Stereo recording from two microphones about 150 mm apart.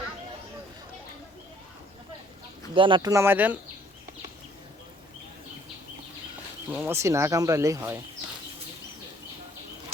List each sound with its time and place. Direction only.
2.7 s speech: 35° right (ahead or behind)
3.1 s speech: 15° right (ahead or behind)
6.7 s speech: 10° right (ahead or behind)